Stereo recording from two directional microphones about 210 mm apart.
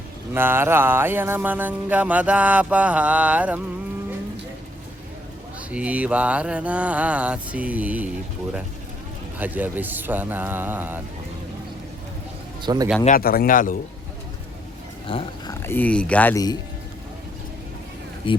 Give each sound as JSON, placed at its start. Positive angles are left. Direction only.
{"t": 0.3, "sound": "music", "side_deg": -10}
{"t": 5.7, "sound": "music", "side_deg": -5}
{"t": 9.4, "sound": "music", "side_deg": -10}
{"t": 12.6, "sound": "speech", "side_deg": -20}
{"t": 13.1, "sound": "a man's voice", "side_deg": 45}
{"t": 15.0, "sound": "dog", "side_deg": 25}
{"t": 15.6, "sound": "speech", "side_deg": 10}
{"t": 18.3, "sound": "speech", "side_deg": 25}